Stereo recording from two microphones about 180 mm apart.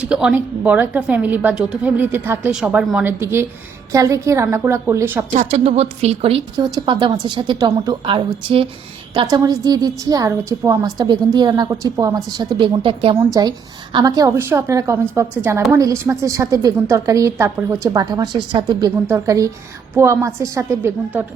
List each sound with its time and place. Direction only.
0.0 s a woman's voice: 5° right (ahead or behind)
5.3 s a woman's voice: 35° right (ahead or behind); by 21.2 s 10° right (ahead or behind)